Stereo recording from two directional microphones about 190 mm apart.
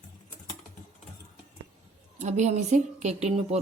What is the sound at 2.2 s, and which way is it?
A woman's voice, 35° right (ahead or behind).